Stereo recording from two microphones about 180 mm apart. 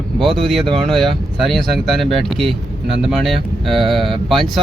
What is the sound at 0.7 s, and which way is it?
Speech, centre (ahead or behind).